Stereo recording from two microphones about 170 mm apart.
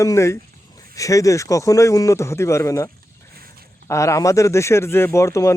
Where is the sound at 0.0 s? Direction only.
15° left (ahead or behind).